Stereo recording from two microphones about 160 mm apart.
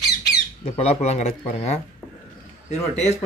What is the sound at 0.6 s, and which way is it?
Speech, 35° left (ahead or behind).